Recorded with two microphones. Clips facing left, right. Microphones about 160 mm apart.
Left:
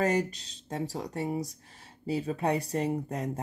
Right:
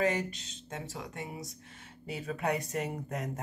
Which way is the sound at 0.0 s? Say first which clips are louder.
Left 3 dB; 40° left (ahead or behind).